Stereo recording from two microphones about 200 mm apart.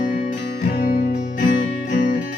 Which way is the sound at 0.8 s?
50° left (ahead or behind).